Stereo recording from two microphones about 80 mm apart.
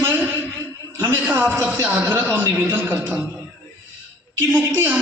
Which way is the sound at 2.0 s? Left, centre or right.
Right.